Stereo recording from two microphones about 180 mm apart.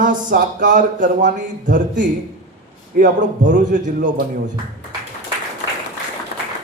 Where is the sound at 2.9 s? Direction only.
45° right (ahead or behind).